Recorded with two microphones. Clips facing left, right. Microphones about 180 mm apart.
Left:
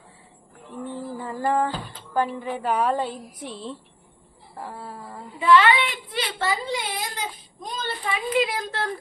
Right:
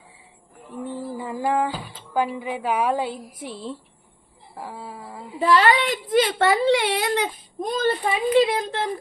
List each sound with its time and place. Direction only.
0.9 s speech: 10° right (ahead or behind)
5.4 s a woman's voice: 40° right (ahead or behind)
6.4 s a child's voice: 70° right (ahead or behind)
8.0 s speech: 25° right (ahead or behind)